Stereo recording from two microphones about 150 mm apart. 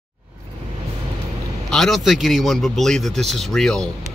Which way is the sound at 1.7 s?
Centre (ahead or behind).